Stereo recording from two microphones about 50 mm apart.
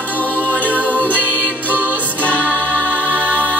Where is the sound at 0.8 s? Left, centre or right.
Left.